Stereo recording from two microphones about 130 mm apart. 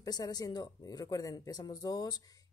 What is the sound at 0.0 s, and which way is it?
Speech, 30° left (ahead or behind).